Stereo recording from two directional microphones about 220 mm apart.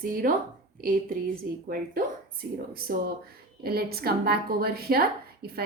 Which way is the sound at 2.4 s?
45° right (ahead or behind).